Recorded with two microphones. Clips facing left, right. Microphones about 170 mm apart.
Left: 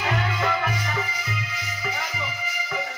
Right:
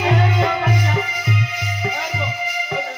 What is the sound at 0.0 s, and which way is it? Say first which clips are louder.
Music: right 7 dB; 20° right (ahead or behind).